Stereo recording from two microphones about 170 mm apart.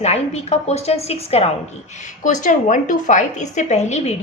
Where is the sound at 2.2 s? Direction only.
50° left (ahead or behind).